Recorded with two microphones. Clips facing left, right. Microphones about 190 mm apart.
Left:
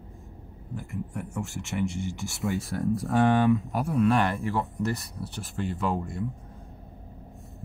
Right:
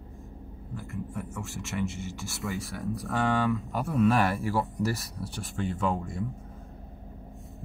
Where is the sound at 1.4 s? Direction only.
Centre (ahead or behind).